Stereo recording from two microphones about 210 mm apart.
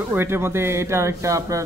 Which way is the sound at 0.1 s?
10° right (ahead or behind).